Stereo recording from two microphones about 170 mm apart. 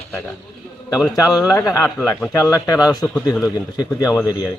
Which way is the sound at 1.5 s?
20° left (ahead or behind).